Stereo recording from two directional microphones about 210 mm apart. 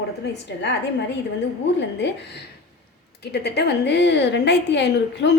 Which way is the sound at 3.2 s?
50° left (ahead or behind).